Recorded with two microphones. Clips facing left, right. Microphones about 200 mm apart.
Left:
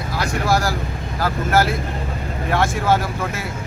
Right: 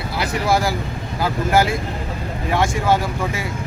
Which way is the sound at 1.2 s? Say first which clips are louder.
Right 1 dB; 15° right (ahead or behind).